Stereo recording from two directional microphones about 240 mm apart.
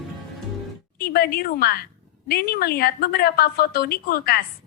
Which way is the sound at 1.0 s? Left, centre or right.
Left.